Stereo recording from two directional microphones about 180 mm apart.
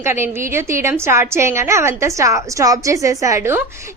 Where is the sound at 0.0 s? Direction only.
15° right (ahead or behind).